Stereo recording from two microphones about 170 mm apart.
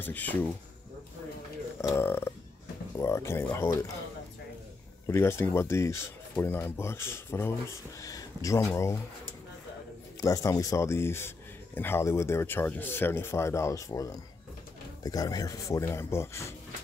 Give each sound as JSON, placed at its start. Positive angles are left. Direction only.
{"t": 0.0, "sound": "speech", "side_deg": 10}
{"t": 1.8, "sound": "speech", "side_deg": 15}
{"t": 5.0, "sound": "speech", "side_deg": 15}
{"t": 10.2, "sound": "speech", "side_deg": 20}